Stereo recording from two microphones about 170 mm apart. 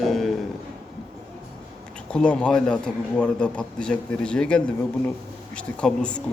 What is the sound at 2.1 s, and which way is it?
Speech, 5° left (ahead or behind).